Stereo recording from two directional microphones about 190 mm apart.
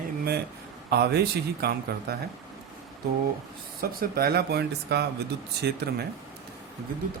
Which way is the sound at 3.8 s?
50° right (ahead or behind).